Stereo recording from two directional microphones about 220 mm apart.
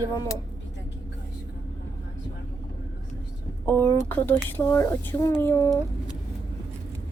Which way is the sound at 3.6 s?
10° left (ahead or behind).